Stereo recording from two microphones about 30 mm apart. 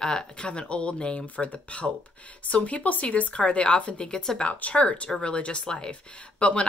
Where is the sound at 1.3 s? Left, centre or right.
Left.